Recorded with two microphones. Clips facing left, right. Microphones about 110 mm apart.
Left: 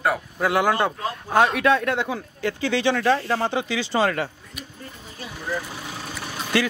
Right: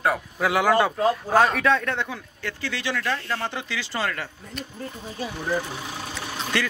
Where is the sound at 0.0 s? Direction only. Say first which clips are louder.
Left 1 dB; centre (ahead or behind).